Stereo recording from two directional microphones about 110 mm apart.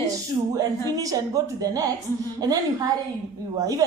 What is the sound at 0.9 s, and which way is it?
Speech, 35° right (ahead or behind).